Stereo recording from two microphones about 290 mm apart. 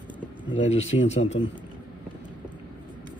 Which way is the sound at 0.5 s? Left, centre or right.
Left.